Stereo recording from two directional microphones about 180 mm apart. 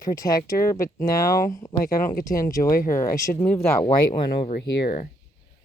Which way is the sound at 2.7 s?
50° left (ahead or behind).